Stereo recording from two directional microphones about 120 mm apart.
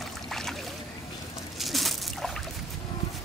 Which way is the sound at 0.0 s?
5° left (ahead or behind).